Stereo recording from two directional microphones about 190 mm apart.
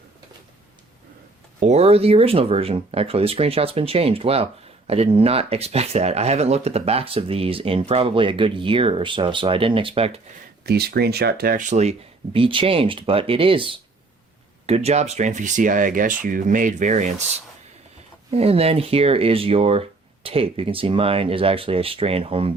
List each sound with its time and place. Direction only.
1.5 s speech: 35° right (ahead or behind)
10.7 s speech: 55° right (ahead or behind); by 22.5 s 30° right (ahead or behind)